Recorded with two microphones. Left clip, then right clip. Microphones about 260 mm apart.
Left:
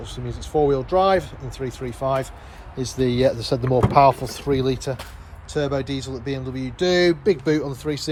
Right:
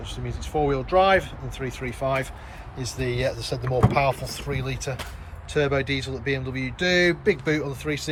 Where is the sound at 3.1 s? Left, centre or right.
Left.